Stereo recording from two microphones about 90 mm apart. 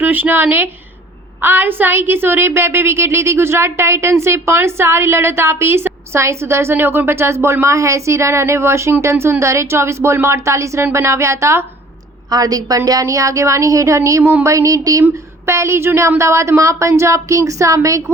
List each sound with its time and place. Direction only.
0.0 s a woman's voice: 20° right (ahead or behind)
12.3 s a woman's voice: 45° right (ahead or behind)